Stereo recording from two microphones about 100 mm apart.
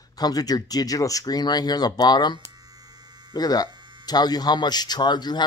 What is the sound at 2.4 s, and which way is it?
Hum, 40° right (ahead or behind).